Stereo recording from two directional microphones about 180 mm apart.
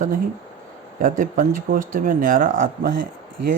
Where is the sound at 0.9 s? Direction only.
50° right (ahead or behind).